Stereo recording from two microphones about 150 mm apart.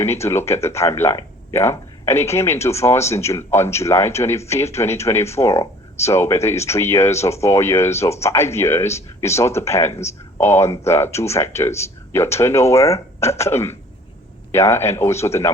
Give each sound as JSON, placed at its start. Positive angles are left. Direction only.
{"t": 0.0, "sound": "speech", "side_deg": 15}